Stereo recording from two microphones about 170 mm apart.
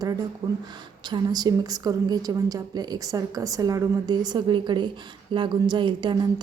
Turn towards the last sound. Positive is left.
turn(degrees=-25)  # may be behind; listen again after turning